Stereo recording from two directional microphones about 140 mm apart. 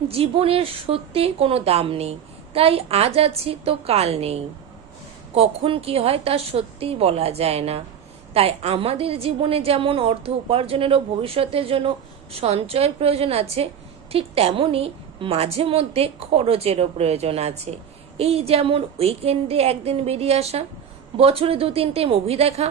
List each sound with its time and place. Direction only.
0.1 s a woman's voice: 45° right (ahead or behind)